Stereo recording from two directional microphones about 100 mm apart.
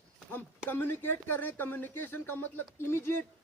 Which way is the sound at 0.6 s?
20° left (ahead or behind).